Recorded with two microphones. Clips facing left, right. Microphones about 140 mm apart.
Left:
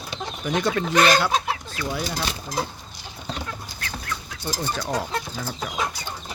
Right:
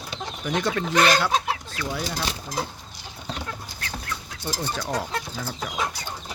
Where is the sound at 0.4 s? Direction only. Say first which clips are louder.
Left 2 dB; 10° left (ahead or behind).